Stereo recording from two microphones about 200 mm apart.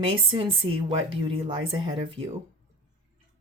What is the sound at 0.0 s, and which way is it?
Speech, 25° right (ahead or behind).